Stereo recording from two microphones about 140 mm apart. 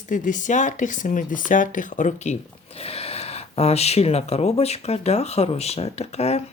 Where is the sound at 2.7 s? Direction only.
45° left (ahead or behind).